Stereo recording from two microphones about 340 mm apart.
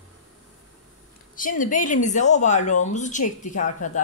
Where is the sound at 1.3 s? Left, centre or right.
Left.